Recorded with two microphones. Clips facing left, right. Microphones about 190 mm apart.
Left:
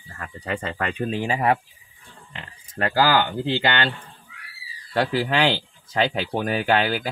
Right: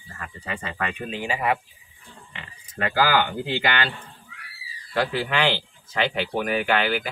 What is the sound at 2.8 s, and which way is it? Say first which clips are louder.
Speech: left 2 dB; 35° left (ahead or behind).